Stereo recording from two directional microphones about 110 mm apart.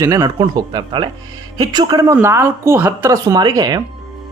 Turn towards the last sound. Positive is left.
turn(degrees=-40)  # may be behind; listen again after turning